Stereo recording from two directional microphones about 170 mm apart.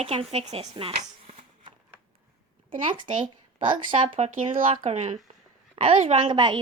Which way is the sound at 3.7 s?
30° right (ahead or behind).